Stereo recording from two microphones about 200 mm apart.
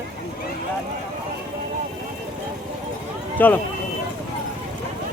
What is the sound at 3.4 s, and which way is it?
Speech, 10° left (ahead or behind).